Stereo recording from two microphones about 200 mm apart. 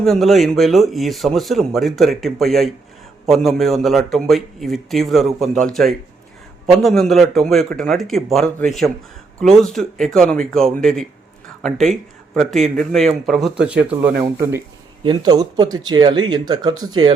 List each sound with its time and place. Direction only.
0.0 s speech: centre (ahead or behind); by 17.2 s 20° right (ahead or behind)